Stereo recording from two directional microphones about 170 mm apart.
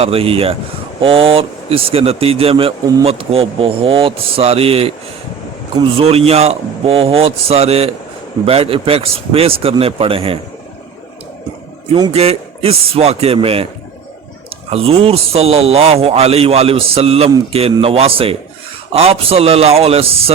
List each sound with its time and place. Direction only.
0.0 s a man's voice: 35° right (ahead or behind)
11.9 s speech: 25° right (ahead or behind)
12.1 s a man's voice: 35° right (ahead or behind)
14.7 s a man's voice: 35° right (ahead or behind)